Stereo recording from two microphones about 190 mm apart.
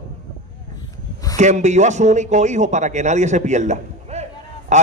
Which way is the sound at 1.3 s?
40° right (ahead or behind).